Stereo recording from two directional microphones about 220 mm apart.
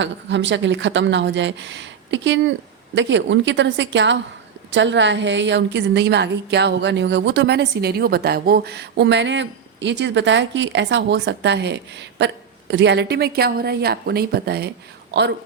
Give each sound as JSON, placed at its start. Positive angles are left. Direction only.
{"t": 0.0, "sound": "a woman's voice", "side_deg": -55}